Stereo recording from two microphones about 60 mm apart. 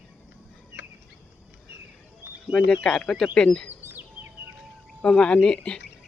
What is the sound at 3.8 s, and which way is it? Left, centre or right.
Bird vocalization, right.